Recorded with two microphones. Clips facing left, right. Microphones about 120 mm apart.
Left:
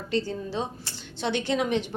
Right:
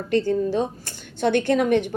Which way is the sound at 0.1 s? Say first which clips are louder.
Right 8 dB; 50° right (ahead or behind).